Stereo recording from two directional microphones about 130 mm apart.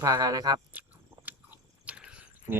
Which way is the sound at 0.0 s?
30° right (ahead or behind).